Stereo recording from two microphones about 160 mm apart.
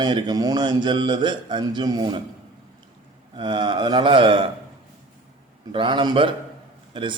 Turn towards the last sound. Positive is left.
turn(degrees=-30)  # may be behind; listen again after turning